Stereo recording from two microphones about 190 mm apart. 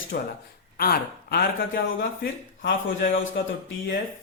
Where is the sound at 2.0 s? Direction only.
65° left (ahead or behind); by 3.3 s 85° left.